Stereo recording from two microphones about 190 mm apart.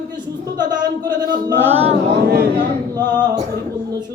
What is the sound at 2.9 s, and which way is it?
Speech, 20° right (ahead or behind).